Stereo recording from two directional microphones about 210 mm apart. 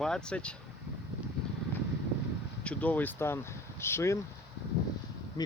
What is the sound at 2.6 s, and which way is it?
Speech, 5° left (ahead or behind).